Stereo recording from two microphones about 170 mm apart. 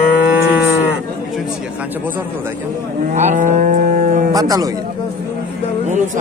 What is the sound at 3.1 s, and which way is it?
Cattle, 45° right (ahead or behind).